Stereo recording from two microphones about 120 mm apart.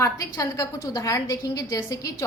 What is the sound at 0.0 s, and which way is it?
A woman's voice, 30° left (ahead or behind).